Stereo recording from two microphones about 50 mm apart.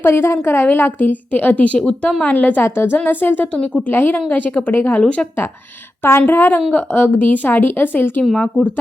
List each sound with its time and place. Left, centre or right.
0.0 s a woman's voice: left
1.9 s speech: centre
2.2 s a woman's voice: left
2.6 s a woman's voice: left
4.7 s speech: left
4.9 s speech: left
6.1 s speech: left
6.7 s a woman's voice: left
8.4 s speech: left